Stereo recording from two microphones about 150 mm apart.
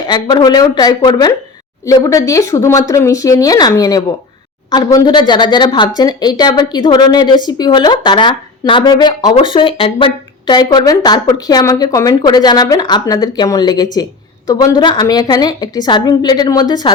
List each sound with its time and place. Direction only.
0.1 s speech: 30° left (ahead or behind)